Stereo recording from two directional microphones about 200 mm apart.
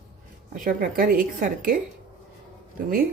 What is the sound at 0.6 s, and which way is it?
A woman's voice, 45° right (ahead or behind).